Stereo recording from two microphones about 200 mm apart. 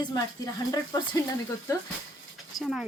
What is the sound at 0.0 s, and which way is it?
Speech, 20° left (ahead or behind).